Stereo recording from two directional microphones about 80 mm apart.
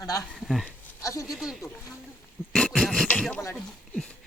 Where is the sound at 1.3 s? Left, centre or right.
Centre.